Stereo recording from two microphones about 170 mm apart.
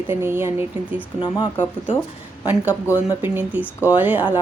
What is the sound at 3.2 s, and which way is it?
A woman's voice, 10° right (ahead or behind).